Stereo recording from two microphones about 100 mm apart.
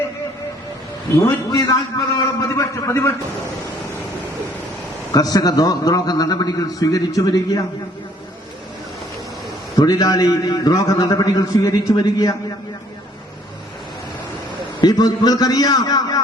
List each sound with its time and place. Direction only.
1.1 s a man's voice: 35° left (ahead or behind)
5.1 s a man's voice: 40° left (ahead or behind)
9.8 s a man's voice: 40° left (ahead or behind)
14.8 s a man's voice: 40° left (ahead or behind)